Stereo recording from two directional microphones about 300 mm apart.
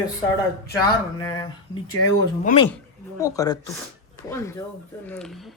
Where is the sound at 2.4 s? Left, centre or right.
Centre.